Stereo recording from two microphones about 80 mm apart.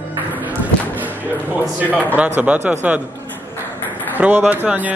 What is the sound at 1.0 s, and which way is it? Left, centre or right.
A man's voice, right.